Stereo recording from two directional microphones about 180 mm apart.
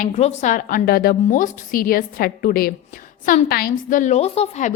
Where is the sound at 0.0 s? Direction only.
40° left (ahead or behind).